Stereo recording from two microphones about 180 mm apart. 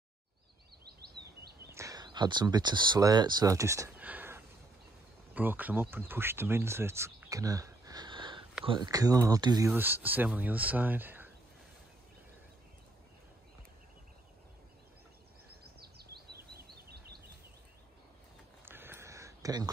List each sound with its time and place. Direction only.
1.7 s speech: 15° right (ahead or behind)
15.8 s bird vocalization: 60° right (ahead or behind)
18.7 s a sound: 10° right (ahead or behind)